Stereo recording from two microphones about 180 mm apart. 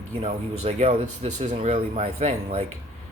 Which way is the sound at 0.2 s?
35° right (ahead or behind).